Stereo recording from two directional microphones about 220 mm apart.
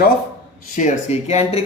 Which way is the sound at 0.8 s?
30° left (ahead or behind).